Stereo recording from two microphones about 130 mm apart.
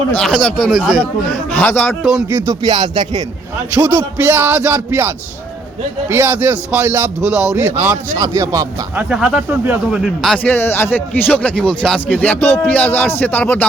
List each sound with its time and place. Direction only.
0.2 s speech: centre (ahead or behind)
2.3 s speech: 30° right (ahead or behind)
4.3 s speech: 15° right (ahead or behind)
7.2 s a man's voice: 25° left (ahead or behind)
7.5 s speech: 15° right (ahead or behind)
9.0 s speech: 5° right (ahead or behind)
10.2 s speech: 10° left (ahead or behind)